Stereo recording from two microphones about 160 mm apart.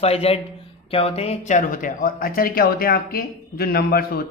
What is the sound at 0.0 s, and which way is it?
A man's voice, 40° left (ahead or behind).